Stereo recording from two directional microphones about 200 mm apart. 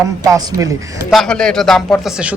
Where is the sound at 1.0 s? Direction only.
Centre (ahead or behind).